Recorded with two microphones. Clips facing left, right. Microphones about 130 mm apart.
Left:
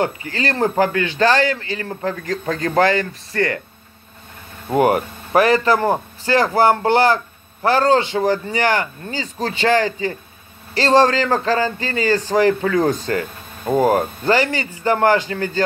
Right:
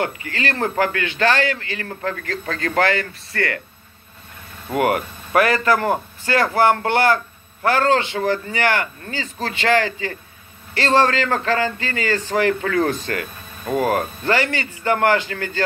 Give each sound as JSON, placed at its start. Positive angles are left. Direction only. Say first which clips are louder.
{"t": 0.0, "sound": "a man's voice", "louder": "left 3 dB", "side_deg": 35}
{"t": 1.9, "sound": "speech", "louder": "left 3 dB", "side_deg": 15}
{"t": 4.6, "sound": "a man's voice", "louder": "left 3 dB", "side_deg": 30}
{"t": 12.6, "sound": "speech", "louder": "left 3 dB", "side_deg": 15}